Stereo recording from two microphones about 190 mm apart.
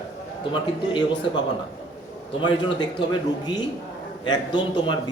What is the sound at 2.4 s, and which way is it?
A man's voice, 25° left (ahead or behind).